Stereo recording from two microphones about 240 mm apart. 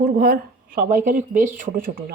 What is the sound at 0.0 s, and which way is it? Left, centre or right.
Speech, right.